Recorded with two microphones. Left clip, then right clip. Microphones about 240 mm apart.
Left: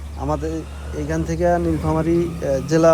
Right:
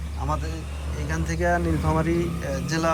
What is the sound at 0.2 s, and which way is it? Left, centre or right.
Speech, left.